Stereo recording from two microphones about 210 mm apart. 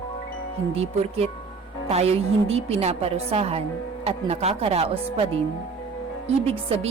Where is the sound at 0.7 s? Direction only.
30° right (ahead or behind).